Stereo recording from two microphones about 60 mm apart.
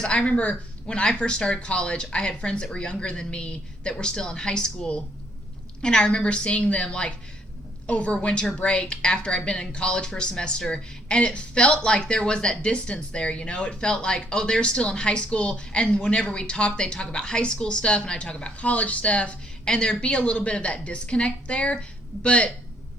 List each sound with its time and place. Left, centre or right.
0.0 s a woman's voice: centre